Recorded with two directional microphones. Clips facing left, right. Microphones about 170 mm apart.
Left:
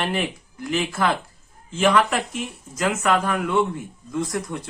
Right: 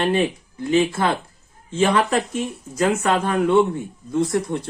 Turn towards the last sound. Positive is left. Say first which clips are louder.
# right 5 dB
turn(degrees=-30)  # may be behind; listen again after turning